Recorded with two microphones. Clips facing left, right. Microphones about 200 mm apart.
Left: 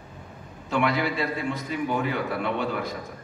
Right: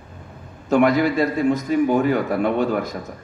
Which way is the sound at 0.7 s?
45° right (ahead or behind).